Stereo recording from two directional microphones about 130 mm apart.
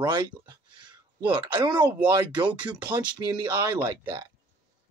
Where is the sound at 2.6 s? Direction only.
10° right (ahead or behind).